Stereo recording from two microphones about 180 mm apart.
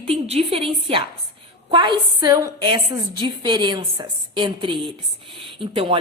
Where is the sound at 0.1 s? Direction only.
35° right (ahead or behind).